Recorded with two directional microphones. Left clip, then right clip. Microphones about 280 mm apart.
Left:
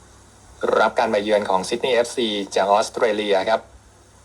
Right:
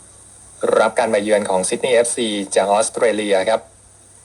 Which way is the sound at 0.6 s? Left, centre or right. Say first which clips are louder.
Right 3 dB; centre.